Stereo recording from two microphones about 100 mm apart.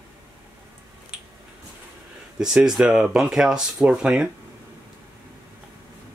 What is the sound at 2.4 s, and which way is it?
Speech, 5° right (ahead or behind).